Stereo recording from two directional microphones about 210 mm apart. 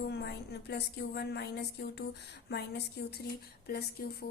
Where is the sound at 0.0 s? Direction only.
50° left (ahead or behind).